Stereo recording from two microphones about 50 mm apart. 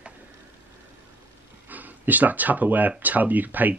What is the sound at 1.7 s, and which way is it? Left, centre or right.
Speech, right.